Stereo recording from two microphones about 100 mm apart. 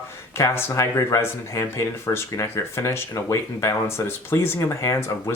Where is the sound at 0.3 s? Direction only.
30° left (ahead or behind).